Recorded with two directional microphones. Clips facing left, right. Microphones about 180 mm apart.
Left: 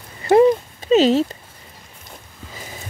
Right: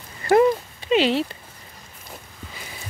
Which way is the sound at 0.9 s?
40° left (ahead or behind).